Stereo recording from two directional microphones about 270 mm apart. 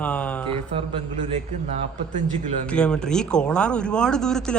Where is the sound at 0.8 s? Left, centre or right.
Right.